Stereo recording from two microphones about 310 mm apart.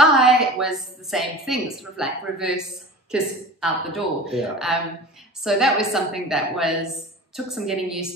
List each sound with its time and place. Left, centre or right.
0.0 s a woman's voice: centre